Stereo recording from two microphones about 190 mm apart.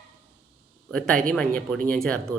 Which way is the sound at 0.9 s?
5° left (ahead or behind).